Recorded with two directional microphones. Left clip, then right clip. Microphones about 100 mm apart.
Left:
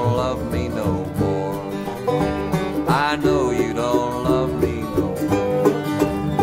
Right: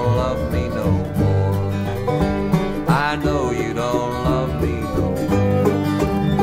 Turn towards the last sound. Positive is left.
turn(degrees=15)  # may be behind; listen again after turning